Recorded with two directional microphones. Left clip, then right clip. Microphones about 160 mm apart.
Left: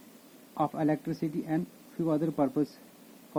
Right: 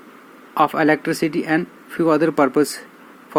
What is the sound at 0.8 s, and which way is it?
Speech, 15° right (ahead or behind).